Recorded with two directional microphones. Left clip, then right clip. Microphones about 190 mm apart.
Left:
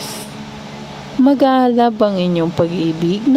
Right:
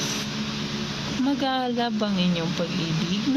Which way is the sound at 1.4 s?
45° left (ahead or behind).